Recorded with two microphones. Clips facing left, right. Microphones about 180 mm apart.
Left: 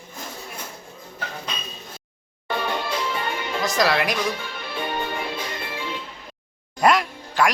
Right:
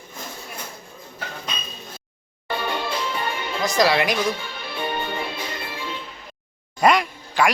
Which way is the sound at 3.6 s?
Centre (ahead or behind).